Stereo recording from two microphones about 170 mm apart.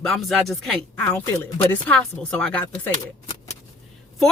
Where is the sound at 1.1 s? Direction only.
10° left (ahead or behind).